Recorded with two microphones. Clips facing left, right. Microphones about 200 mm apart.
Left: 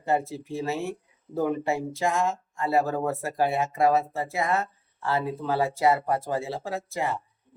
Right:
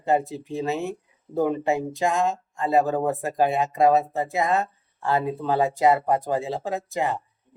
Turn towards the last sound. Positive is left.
turn(degrees=-20)  # may be behind; listen again after turning